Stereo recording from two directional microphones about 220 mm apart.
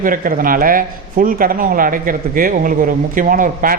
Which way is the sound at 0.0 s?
40° right (ahead or behind).